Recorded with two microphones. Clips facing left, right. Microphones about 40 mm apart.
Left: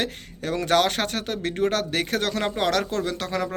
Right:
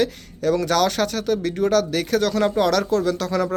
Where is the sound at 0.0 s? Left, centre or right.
Left.